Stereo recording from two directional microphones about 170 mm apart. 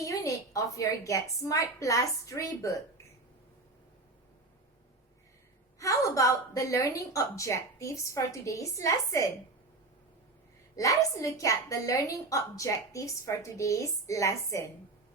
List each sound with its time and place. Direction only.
0.0 s a woman's voice: 20° left (ahead or behind)
5.8 s a woman's voice: 20° left (ahead or behind)
10.8 s a woman's voice: 20° left (ahead or behind)